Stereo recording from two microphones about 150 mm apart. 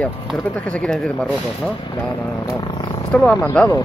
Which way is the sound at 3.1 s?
10° left (ahead or behind).